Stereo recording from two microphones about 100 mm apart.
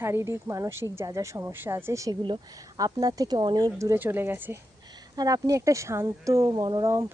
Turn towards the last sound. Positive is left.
turn(degrees=-45)  # may be behind; listen again after turning